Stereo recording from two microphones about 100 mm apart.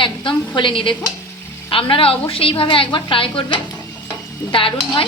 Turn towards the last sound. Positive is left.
turn(degrees=60)  # may be behind; listen again after turning